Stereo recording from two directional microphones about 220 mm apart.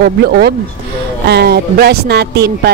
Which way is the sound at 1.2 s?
45° right (ahead or behind).